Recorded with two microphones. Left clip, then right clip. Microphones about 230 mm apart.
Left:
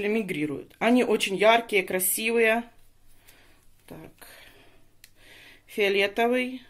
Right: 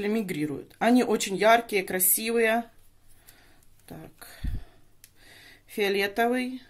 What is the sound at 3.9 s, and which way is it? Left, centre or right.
Speech, right.